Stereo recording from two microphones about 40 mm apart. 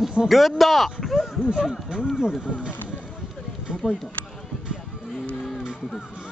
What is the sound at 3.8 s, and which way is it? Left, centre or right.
Speech, centre.